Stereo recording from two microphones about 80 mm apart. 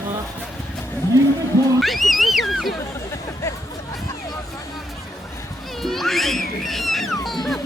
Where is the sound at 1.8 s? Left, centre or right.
Centre.